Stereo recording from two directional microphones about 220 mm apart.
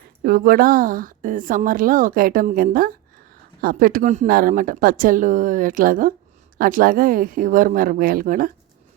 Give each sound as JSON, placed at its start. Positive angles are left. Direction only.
{"t": 0.3, "sound": "a woman's voice", "side_deg": -40}